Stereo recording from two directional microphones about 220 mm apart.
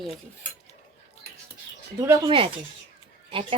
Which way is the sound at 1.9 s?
15° right (ahead or behind).